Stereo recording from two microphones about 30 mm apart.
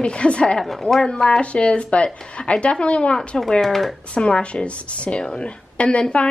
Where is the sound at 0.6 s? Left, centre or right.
Centre.